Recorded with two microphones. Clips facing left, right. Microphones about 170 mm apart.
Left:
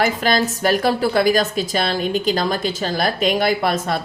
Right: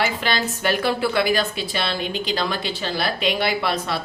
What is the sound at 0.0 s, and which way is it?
A woman's voice, 40° left (ahead or behind).